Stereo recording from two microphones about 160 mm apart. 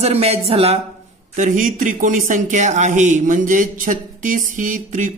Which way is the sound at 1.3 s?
50° right (ahead or behind).